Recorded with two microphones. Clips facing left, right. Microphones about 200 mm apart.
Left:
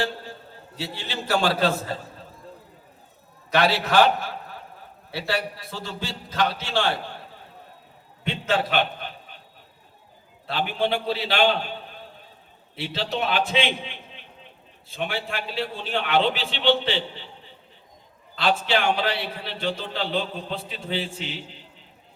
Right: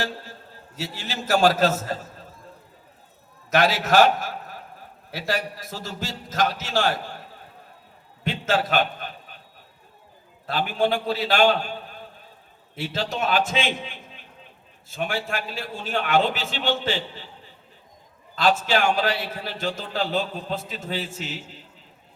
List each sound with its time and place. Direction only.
0.8 s a man's voice: 45° right (ahead or behind)
3.5 s a man's voice: 45° right (ahead or behind)
8.4 s a man's voice: 45° right (ahead or behind)
10.4 s a man's voice: 45° right (ahead or behind)
12.7 s a man's voice: 45° right (ahead or behind)
18.3 s a man's voice: 45° right (ahead or behind)